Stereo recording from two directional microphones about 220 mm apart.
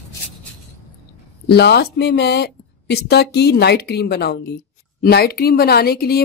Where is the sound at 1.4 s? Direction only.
50° left (ahead or behind).